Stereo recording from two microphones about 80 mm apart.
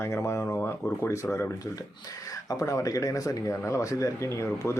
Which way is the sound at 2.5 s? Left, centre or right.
Left.